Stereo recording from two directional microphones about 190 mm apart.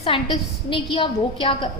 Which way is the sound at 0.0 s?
25° left (ahead or behind).